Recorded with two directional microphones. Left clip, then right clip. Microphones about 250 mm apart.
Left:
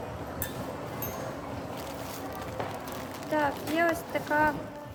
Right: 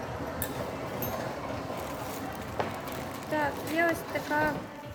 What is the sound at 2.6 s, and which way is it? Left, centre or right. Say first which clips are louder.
Fire: right 4 dB; right.